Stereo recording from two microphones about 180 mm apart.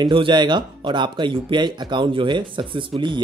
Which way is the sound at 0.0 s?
25° right (ahead or behind).